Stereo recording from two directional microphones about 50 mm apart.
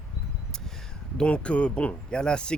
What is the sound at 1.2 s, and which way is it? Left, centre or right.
Speech, left.